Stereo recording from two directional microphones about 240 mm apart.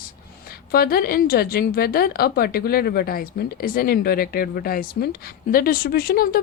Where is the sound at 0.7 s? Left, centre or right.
Left.